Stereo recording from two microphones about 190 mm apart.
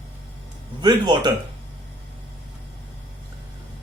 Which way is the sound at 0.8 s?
20° right (ahead or behind).